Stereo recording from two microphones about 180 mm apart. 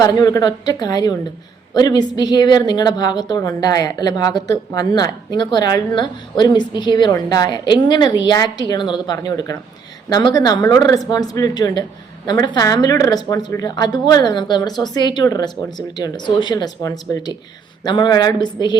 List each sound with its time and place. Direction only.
0.0 s a woman's voice: 20° left (ahead or behind)